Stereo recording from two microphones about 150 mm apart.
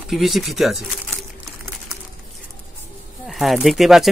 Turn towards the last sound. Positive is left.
turn(degrees=0)  # may be behind; listen again after turning